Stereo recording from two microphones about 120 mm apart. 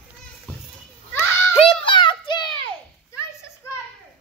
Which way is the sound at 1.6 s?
45° left (ahead or behind).